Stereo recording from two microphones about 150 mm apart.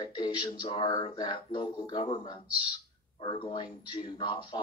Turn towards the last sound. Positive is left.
turn(degrees=30)  # may be behind; listen again after turning